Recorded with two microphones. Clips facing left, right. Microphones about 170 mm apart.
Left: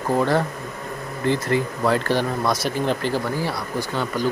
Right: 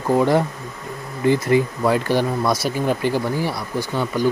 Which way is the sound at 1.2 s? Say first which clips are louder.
Right 5 dB; 15° right (ahead or behind).